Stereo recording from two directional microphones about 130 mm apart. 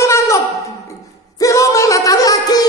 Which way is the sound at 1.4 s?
25° left (ahead or behind).